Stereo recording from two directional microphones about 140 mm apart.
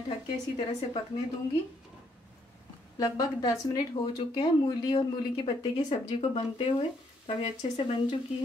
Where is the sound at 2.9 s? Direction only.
30° left (ahead or behind).